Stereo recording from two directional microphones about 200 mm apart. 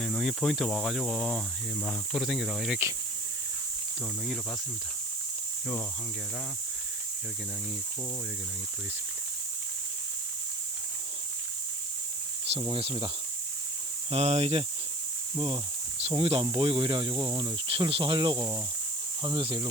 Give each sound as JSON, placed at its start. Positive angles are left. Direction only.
{"t": 0.0, "sound": "speech", "side_deg": 0}
{"t": 12.5, "sound": "speech", "side_deg": -25}
{"t": 14.1, "sound": "speech", "side_deg": -30}